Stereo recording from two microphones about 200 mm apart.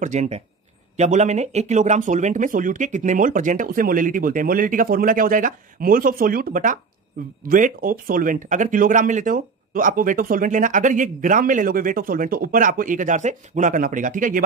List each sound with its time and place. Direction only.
0.0 s speech: 35° right (ahead or behind)